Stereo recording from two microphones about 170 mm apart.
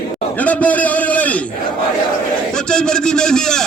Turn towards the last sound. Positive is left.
turn(degrees=5)  # may be behind; listen again after turning